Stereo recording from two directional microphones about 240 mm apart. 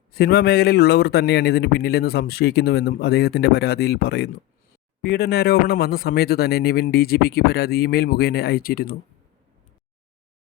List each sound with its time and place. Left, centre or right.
0.1 s a man's voice: left